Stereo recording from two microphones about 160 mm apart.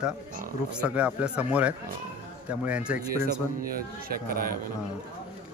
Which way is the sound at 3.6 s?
65° right (ahead or behind).